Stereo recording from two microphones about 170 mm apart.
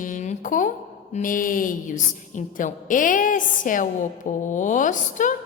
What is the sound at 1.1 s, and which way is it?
A woman's voice, 50° left (ahead or behind).